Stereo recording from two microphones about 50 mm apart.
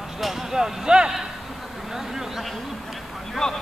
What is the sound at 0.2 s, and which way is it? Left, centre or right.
A man's voice, centre.